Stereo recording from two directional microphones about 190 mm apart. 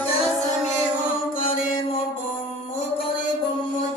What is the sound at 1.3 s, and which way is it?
Music, 45° left (ahead or behind).